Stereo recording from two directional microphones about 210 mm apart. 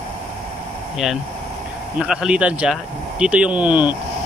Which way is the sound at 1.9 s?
5° right (ahead or behind).